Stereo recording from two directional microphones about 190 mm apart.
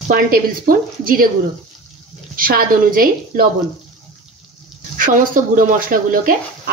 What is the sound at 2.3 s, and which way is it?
Speech, 50° right (ahead or behind).